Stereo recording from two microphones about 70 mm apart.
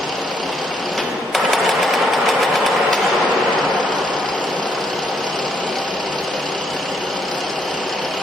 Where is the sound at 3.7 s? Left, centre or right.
Left.